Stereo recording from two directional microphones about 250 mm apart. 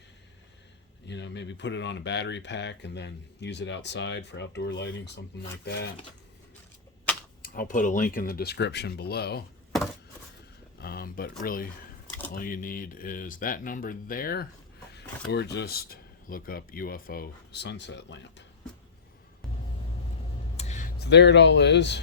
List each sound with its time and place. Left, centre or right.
1.0 s speech: left
7.4 s speech: left
10.8 s speech: left
20.6 s speech: left